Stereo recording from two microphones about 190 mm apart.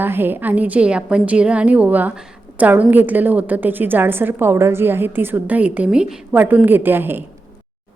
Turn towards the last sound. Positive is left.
turn(degrees=-10)  # may be behind; listen again after turning